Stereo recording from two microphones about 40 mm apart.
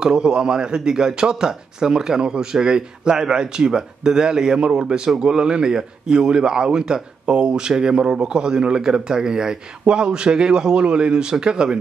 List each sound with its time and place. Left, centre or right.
0.0 s a man's voice: right